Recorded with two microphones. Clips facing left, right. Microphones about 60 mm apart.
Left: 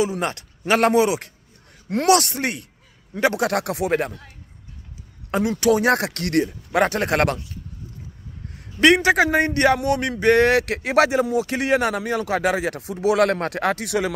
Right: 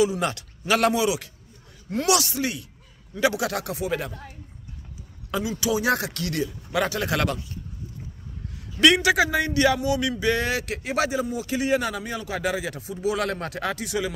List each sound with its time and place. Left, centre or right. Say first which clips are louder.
0.0 s speech: even; left
5.3 s speech: left 7 dB; left
8.8 s a man's voice: left 3 dB; left